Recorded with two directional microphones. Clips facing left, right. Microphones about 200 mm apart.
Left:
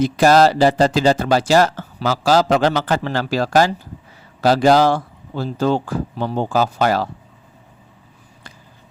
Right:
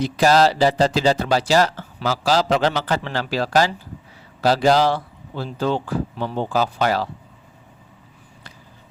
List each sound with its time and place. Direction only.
0.0 s speech: 50° left (ahead or behind)